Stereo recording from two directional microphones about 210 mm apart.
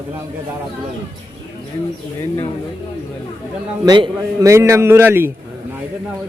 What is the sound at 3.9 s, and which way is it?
A man's voice, 20° right (ahead or behind).